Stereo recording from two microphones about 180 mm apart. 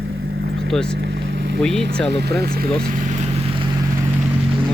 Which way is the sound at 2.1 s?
65° right (ahead or behind).